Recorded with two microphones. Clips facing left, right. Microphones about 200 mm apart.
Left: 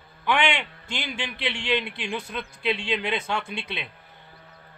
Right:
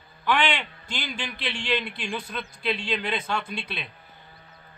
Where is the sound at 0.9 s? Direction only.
25° left (ahead or behind).